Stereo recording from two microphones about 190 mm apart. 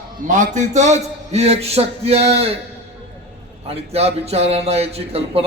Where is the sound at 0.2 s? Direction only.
40° right (ahead or behind).